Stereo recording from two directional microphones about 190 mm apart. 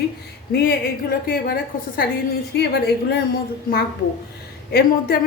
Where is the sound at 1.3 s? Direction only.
50° left (ahead or behind).